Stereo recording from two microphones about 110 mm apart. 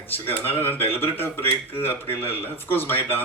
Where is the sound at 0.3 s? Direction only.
20° left (ahead or behind).